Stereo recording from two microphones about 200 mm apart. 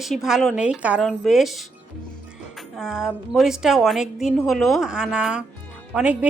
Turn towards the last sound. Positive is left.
turn(degrees=-5)  # may be behind; listen again after turning